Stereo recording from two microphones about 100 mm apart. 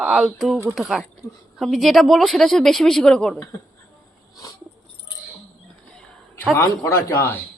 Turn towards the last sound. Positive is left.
turn(degrees=30)  # may be behind; listen again after turning